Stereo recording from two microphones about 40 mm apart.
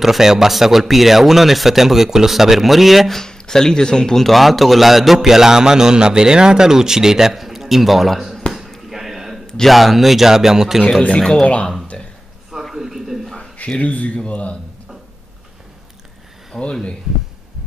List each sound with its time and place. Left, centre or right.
0.0 s a man's voice: centre
3.1 s speech: centre
4.3 s a man's voice: centre
8.7 s chop: centre
9.7 s a man's voice: centre
11.1 s speech: centre
11.9 s a sound: left
12.7 s a sound: centre
13.6 s speech: left
16.5 s speech: left